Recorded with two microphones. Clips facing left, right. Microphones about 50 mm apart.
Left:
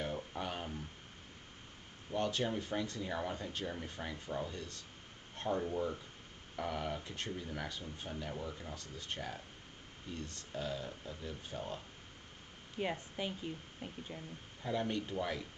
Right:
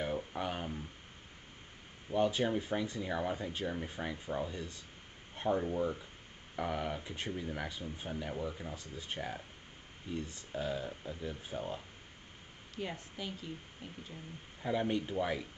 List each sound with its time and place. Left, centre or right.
0.0 s a sound: centre
2.0 s speech: centre
12.7 s a woman's voice: left
14.6 s speech: centre